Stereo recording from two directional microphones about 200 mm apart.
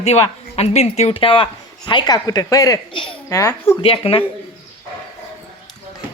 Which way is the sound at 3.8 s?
30° left (ahead or behind).